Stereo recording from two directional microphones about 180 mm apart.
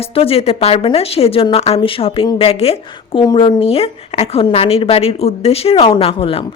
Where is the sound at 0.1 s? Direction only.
35° left (ahead or behind).